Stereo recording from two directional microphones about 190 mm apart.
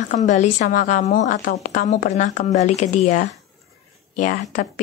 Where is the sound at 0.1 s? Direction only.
40° left (ahead or behind).